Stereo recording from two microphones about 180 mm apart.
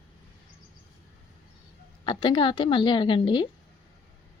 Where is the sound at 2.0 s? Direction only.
25° left (ahead or behind).